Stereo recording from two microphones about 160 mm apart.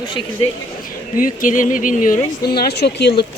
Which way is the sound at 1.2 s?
55° left (ahead or behind).